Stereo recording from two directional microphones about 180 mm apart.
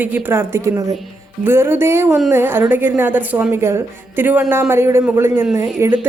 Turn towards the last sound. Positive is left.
turn(degrees=-15)  # may be behind; listen again after turning